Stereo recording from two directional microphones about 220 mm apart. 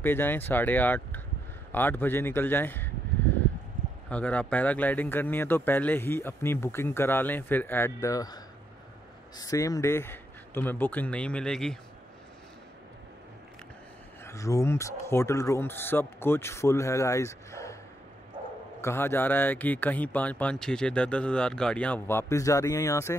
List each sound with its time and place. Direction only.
0.0 s speech: 10° left (ahead or behind)
9.4 s speech: 15° left (ahead or behind)
14.2 s speech: 15° left (ahead or behind)
18.8 s speech: 10° left (ahead or behind)